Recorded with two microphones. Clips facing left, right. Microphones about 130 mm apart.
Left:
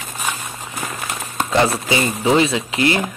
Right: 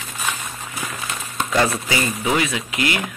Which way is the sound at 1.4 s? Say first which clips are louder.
Left 3 dB; 30° left (ahead or behind).